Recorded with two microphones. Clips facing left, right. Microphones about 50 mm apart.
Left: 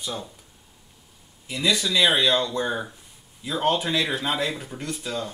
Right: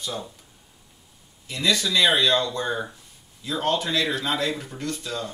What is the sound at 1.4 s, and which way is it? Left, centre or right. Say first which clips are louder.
Speech: even; centre.